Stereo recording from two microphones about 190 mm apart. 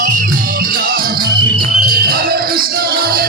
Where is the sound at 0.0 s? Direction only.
45° right (ahead or behind).